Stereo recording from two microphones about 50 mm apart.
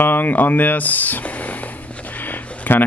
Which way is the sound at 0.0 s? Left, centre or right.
Left.